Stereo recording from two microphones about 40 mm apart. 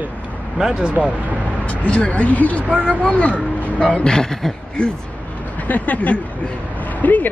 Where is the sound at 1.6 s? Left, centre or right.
Left.